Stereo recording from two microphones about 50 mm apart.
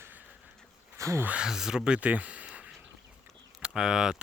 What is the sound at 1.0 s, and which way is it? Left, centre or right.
Speech, right.